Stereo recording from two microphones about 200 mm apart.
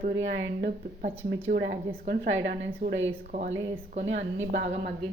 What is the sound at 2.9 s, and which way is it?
A woman's voice, 70° right (ahead or behind).